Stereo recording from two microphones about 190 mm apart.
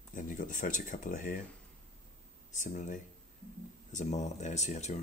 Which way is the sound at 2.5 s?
40° left (ahead or behind).